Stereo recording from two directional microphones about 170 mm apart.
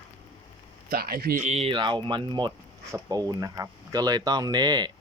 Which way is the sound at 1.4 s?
40° right (ahead or behind).